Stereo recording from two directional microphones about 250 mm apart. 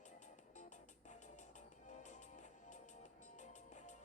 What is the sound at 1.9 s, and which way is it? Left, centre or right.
Music, left.